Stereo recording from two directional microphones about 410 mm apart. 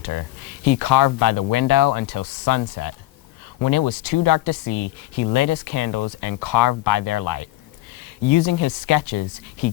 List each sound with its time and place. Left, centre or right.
0.0 s speech: left